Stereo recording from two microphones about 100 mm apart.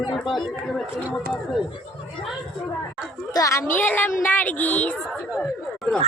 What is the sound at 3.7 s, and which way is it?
A woman's voice, 20° left (ahead or behind).